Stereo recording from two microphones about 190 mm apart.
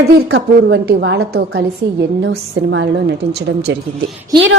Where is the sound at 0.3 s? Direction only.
65° right (ahead or behind).